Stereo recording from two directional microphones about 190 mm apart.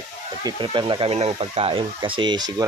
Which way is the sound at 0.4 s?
25° right (ahead or behind).